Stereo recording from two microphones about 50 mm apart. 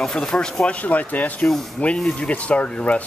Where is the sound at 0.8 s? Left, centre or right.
Left.